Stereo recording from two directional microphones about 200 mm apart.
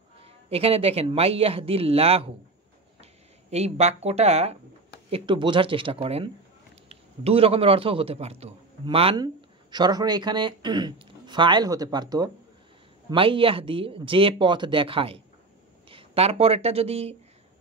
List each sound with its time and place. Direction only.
0.2 s a man's voice: 30° right (ahead or behind)